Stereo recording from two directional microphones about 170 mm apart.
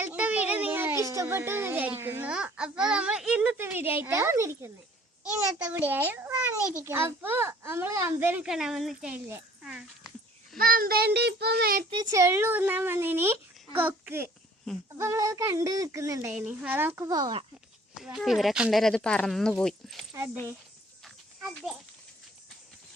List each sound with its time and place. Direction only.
0.0 s a sound: 10° right (ahead or behind)
2.0 s speech: 10° right (ahead or behind)
5.2 s speech: 5° right (ahead or behind)
10.6 s a child's voice: 60° right (ahead or behind)
11.9 s speech: 20° right (ahead or behind)
17.9 s speech: centre (ahead or behind)
21.5 s speech: centre (ahead or behind)